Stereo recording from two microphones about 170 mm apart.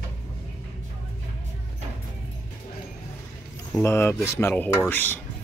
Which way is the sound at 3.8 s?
15° left (ahead or behind).